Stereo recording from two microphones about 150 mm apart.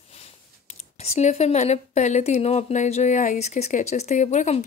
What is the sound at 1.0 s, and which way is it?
Speech, 45° left (ahead or behind).